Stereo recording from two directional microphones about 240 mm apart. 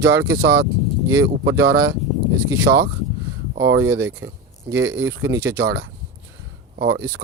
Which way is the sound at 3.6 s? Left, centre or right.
Right.